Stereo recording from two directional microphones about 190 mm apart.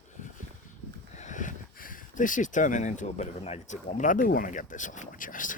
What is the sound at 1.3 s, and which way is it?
Speech, 40° left (ahead or behind).